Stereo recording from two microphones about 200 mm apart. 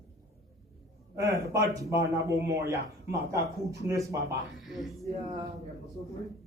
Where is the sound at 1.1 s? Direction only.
15° right (ahead or behind).